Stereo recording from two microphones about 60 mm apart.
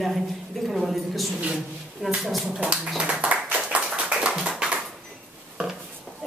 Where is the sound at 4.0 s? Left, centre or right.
Centre.